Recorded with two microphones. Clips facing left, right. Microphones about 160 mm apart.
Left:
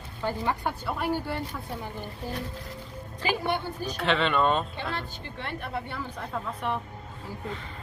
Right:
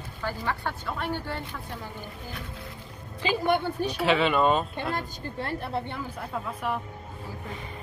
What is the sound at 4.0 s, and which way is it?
Speech, 5° right (ahead or behind).